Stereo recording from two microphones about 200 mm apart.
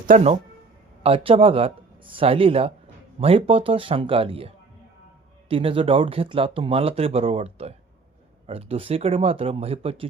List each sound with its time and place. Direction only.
0.1 s speech: 40° right (ahead or behind)
1.0 s speech: 30° right (ahead or behind)